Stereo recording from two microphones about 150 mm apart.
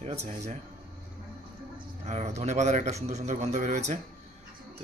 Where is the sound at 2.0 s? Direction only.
50° right (ahead or behind).